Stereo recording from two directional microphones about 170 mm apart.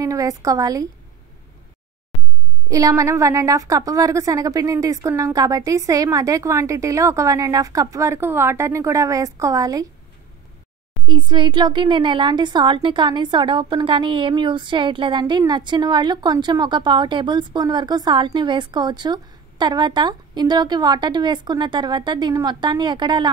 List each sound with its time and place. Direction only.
0.0 s a woman's voice: 20° right (ahead or behind)
2.7 s a woman's voice: 20° right (ahead or behind)
11.1 s a woman's voice: 30° right (ahead or behind)